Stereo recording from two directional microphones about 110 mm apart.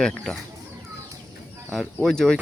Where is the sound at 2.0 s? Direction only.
5° left (ahead or behind).